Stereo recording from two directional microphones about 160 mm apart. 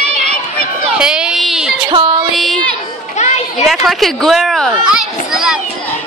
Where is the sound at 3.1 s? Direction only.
45° left (ahead or behind).